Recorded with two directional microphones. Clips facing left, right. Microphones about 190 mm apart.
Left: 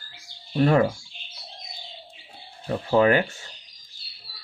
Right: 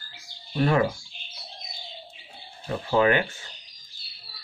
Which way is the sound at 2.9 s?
35° left (ahead or behind).